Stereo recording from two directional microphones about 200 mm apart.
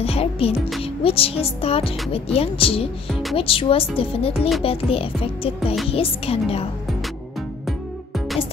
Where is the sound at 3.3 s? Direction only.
25° left (ahead or behind).